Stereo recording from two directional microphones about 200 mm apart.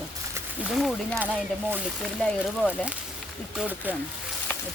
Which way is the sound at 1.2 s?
10° right (ahead or behind).